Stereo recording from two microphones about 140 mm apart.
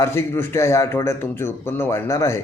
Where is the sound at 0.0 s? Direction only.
15° left (ahead or behind).